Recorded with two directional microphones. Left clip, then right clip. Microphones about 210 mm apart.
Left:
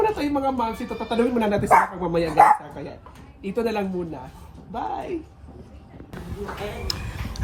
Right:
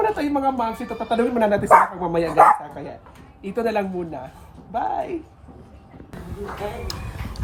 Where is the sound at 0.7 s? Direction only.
15° right (ahead or behind).